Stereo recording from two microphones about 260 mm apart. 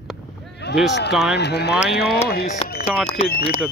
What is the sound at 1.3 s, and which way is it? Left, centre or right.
Speech, left.